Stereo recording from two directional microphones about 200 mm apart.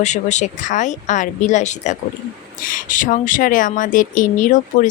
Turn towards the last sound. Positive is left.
turn(degrees=40)  # may be behind; listen again after turning